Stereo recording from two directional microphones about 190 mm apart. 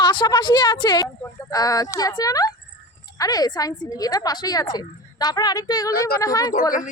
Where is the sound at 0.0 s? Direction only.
25° left (ahead or behind).